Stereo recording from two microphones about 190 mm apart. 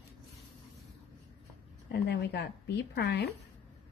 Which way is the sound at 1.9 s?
60° left (ahead or behind).